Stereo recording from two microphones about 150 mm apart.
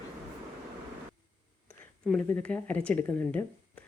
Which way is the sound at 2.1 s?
5° left (ahead or behind).